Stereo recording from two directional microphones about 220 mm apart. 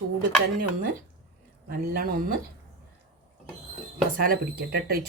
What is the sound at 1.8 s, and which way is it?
Speech, 40° right (ahead or behind).